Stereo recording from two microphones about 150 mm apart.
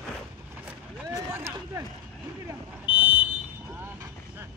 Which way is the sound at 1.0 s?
20° right (ahead or behind).